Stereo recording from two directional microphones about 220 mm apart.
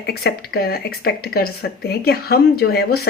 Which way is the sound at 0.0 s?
45° left (ahead or behind).